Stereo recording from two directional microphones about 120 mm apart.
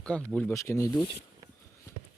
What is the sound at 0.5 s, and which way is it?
Speech, 25° left (ahead or behind).